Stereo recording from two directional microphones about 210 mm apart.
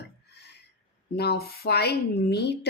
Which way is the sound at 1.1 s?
50° left (ahead or behind).